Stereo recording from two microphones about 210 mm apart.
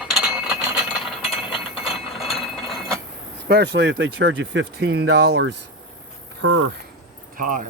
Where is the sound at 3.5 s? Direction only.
55° right (ahead or behind).